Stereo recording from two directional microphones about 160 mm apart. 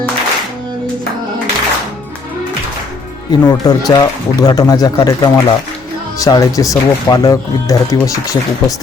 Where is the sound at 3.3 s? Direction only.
25° left (ahead or behind).